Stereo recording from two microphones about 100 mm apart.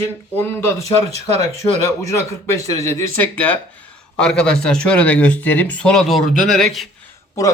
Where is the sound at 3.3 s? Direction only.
15° left (ahead or behind).